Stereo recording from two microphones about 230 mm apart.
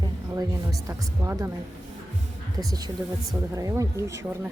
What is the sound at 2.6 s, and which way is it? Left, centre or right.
Speech, centre.